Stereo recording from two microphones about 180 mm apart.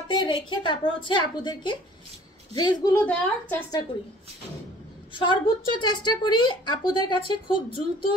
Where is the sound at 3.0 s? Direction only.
10° left (ahead or behind).